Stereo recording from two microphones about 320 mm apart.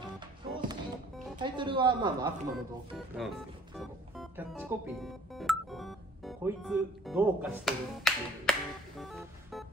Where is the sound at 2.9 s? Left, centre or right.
Centre.